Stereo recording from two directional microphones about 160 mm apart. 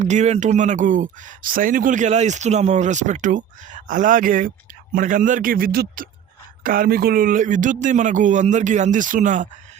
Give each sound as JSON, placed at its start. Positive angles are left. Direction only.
{"t": 0.0, "sound": "a man's voice", "side_deg": -45}